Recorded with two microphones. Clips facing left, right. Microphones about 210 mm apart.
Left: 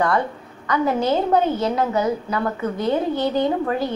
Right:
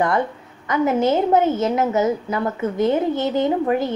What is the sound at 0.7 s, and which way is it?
A woman's voice, 20° right (ahead or behind).